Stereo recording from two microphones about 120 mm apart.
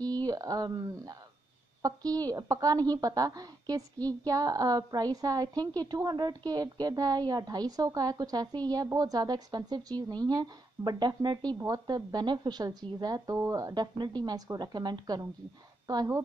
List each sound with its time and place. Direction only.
0.1 s a woman's voice: 30° right (ahead or behind)